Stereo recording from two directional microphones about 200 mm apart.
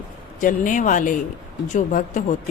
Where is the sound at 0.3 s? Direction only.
40° left (ahead or behind).